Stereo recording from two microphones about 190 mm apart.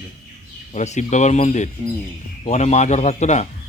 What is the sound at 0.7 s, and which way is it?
A man's voice, 40° left (ahead or behind).